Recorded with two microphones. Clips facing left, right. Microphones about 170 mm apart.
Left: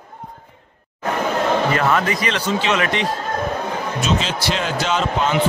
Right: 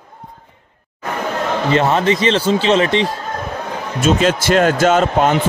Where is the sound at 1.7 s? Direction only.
25° right (ahead or behind).